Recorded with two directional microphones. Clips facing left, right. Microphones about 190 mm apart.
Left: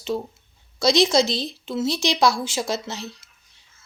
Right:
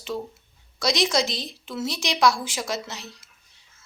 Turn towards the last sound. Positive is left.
turn(degrees=25)  # may be behind; listen again after turning